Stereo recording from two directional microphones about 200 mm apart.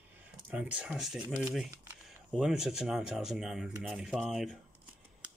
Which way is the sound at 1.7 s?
10° right (ahead or behind).